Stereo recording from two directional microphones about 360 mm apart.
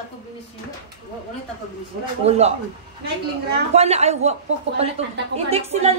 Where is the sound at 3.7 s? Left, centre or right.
Centre.